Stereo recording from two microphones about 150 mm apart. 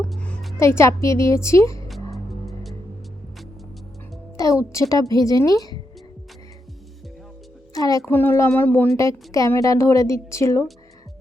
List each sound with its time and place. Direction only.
0.1 s music: 5° left (ahead or behind)
0.6 s a woman's voice: 20° left (ahead or behind)
4.4 s a woman's voice: 20° left (ahead or behind)
7.7 s a woman's voice: 25° left (ahead or behind)